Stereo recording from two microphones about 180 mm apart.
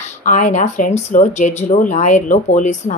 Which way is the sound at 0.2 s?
45° left (ahead or behind).